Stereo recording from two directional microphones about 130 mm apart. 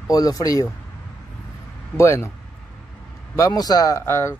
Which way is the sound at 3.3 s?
30° left (ahead or behind).